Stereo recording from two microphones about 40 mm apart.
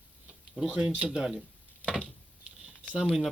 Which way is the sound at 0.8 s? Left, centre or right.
Right.